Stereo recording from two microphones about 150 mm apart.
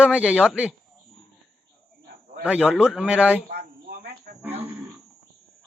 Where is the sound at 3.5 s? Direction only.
90° right.